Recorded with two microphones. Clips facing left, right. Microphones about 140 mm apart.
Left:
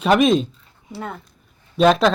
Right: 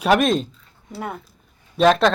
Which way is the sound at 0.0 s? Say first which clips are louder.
Left 2 dB; centre (ahead or behind).